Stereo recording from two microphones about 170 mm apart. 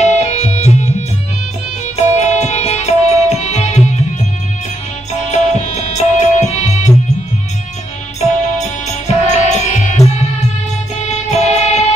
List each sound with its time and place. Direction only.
0.0 s music: 40° left (ahead or behind)
5.3 s music: 40° left (ahead or behind)
8.2 s music: 40° left (ahead or behind)
11.2 s music: 40° left (ahead or behind)